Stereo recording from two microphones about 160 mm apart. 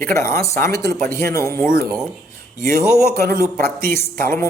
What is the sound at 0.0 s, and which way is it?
Speech, 15° left (ahead or behind).